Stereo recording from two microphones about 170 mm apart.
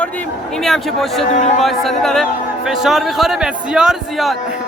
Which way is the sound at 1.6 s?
Centre (ahead or behind).